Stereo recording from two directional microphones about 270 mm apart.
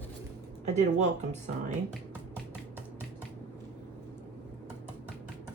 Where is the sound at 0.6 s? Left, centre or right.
Right.